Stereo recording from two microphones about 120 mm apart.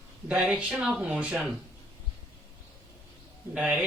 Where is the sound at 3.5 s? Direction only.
10° right (ahead or behind).